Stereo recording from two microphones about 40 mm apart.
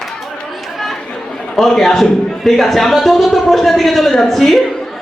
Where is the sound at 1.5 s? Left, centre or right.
Centre.